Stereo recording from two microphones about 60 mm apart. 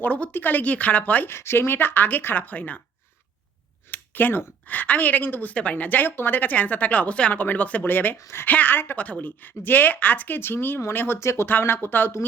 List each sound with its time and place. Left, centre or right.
0.0 s speech: left
1.3 s speech: left
3.9 s speech: left
11.2 s speech: left
11.4 s speech: left